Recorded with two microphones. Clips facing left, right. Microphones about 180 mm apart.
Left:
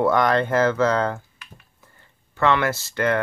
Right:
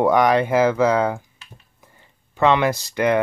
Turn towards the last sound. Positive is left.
turn(degrees=-15)  # may be behind; listen again after turning